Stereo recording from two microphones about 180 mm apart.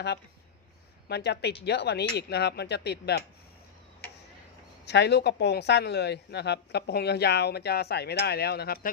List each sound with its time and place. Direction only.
1.0 s speech: 65° left (ahead or behind)
4.9 s speech: 70° left (ahead or behind)